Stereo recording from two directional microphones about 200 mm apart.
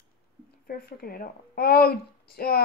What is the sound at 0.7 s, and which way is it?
A woman's voice, 45° left (ahead or behind).